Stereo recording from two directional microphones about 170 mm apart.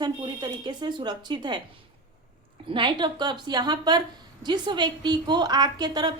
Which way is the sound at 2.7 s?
30° right (ahead or behind).